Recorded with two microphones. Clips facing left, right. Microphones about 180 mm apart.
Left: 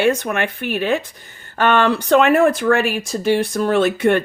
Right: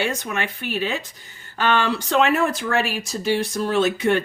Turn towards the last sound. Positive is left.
turn(degrees=55)  # may be behind; listen again after turning